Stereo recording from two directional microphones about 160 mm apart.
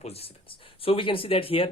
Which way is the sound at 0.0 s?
40° left (ahead or behind).